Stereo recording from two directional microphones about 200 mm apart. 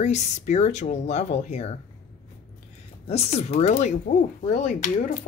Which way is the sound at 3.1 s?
30° left (ahead or behind).